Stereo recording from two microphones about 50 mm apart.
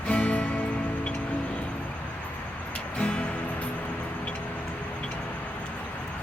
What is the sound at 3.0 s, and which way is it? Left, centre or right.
Music, left.